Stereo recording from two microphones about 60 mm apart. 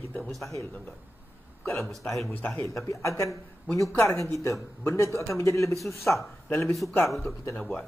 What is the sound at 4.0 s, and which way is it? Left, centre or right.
Speech, left.